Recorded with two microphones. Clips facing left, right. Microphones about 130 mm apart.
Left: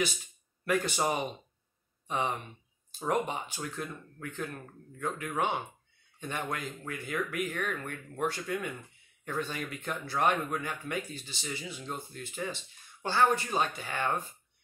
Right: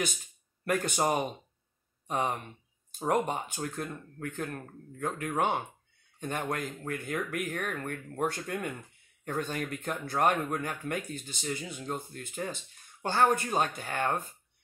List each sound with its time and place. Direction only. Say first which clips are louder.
0.7 s speech: right 1 dB; 50° right (ahead or behind)